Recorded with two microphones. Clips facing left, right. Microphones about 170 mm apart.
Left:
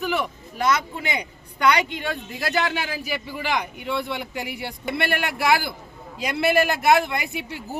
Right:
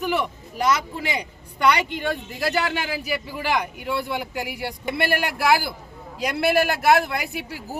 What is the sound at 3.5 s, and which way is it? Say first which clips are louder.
Speech: right 1 dB; 10° right (ahead or behind).